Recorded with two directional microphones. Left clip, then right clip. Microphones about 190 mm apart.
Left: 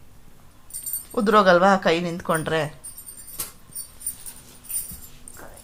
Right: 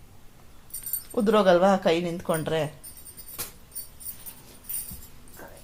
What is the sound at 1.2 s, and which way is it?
A woman's voice, centre (ahead or behind).